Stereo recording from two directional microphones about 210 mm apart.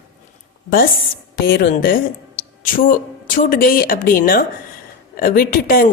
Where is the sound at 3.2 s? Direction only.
40° left (ahead or behind).